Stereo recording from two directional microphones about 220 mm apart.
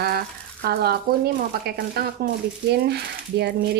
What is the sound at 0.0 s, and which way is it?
A woman's voice, 45° right (ahead or behind).